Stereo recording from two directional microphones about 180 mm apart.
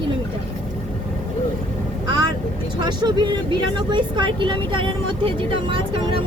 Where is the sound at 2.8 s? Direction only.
25° right (ahead or behind).